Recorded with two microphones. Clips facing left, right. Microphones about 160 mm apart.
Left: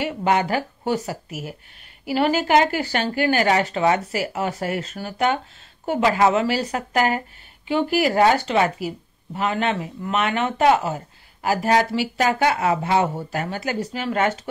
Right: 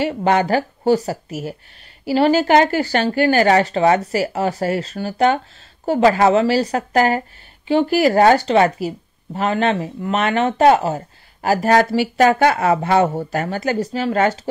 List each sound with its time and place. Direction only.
0.0 s speech: 40° right (ahead or behind)
8.5 s speech: 35° right (ahead or behind)
11.7 s speech: 55° right (ahead or behind); by 14.5 s 35° right (ahead or behind)